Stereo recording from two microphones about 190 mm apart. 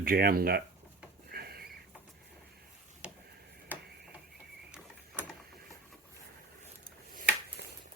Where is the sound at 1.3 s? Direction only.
55° right (ahead or behind).